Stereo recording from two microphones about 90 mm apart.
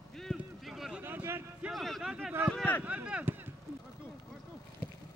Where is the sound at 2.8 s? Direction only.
15° right (ahead or behind).